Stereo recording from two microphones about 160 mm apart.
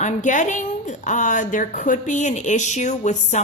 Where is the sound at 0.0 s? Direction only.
50° left (ahead or behind).